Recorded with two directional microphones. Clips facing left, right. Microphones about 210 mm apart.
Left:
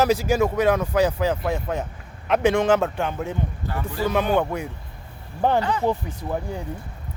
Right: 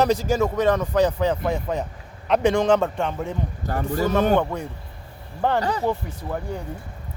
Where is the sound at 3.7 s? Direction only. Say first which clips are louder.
Right 4 dB; 45° right (ahead or behind).